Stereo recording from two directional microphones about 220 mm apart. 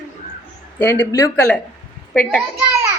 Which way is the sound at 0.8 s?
10° left (ahead or behind).